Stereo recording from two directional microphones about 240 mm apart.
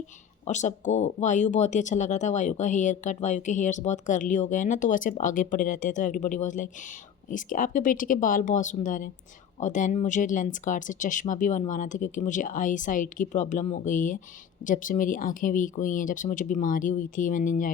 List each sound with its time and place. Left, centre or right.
0.4 s speech: left